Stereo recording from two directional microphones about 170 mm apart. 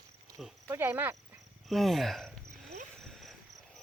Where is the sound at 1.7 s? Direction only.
Centre (ahead or behind).